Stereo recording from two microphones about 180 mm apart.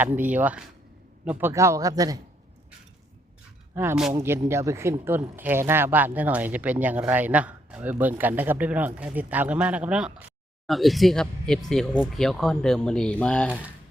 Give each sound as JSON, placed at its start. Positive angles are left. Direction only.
{"t": 0.0, "sound": "speech", "side_deg": -10}
{"t": 3.8, "sound": "speech", "side_deg": -5}